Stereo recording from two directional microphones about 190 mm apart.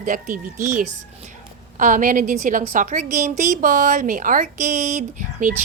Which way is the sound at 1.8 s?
45° right (ahead or behind).